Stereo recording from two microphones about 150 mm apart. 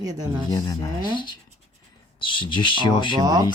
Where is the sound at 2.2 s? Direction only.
35° left (ahead or behind).